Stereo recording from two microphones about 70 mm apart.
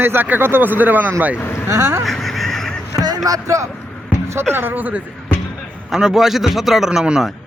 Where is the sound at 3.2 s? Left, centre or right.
Right.